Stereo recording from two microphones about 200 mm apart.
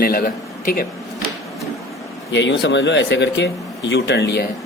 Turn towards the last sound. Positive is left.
turn(degrees=55)  # may be behind; listen again after turning